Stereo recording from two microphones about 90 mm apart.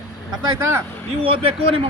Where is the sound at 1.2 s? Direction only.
90° right.